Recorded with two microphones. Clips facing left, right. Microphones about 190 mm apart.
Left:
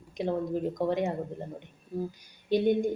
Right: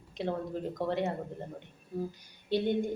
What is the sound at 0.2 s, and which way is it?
Speech, 15° left (ahead or behind).